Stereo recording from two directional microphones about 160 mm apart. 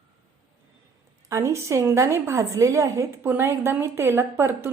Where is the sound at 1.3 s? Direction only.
20° right (ahead or behind).